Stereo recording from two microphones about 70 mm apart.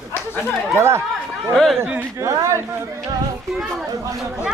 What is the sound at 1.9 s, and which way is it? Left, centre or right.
Speech, right.